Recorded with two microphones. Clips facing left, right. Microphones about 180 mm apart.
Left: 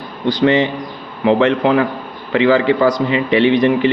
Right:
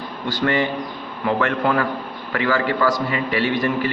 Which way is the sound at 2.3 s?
20° left (ahead or behind).